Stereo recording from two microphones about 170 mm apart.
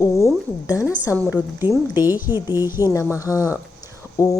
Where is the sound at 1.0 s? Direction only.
15° left (ahead or behind).